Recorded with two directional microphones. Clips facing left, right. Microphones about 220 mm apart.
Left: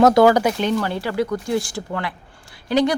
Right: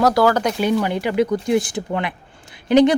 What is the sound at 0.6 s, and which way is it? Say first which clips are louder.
Speech: right 2 dB; 15° right (ahead or behind).